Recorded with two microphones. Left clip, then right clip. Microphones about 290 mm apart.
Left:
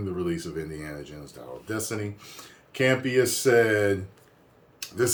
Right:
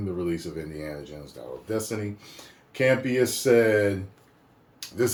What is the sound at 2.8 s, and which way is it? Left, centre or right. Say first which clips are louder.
Speech: even; centre.